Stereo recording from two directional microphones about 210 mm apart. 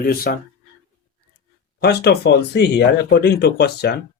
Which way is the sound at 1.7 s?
50° left (ahead or behind).